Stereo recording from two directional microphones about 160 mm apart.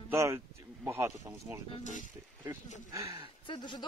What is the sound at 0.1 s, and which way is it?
Speech, 15° right (ahead or behind).